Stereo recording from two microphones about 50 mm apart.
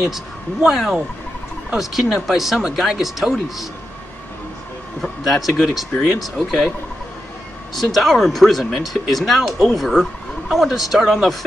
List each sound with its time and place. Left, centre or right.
0.1 s speech: centre
5.0 s a man's voice: centre
7.7 s speech: centre